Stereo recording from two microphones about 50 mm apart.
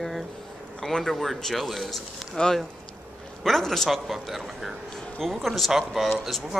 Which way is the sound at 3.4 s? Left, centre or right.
Centre.